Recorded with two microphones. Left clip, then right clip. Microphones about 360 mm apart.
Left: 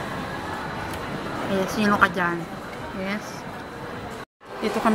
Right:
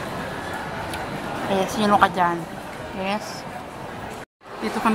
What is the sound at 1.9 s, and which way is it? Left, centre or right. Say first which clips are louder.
Speech: right 4 dB; centre.